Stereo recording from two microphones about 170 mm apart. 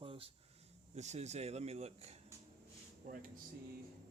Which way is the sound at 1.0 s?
40° right (ahead or behind).